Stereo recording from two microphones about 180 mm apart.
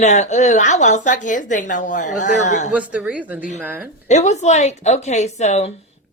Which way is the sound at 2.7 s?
5° right (ahead or behind).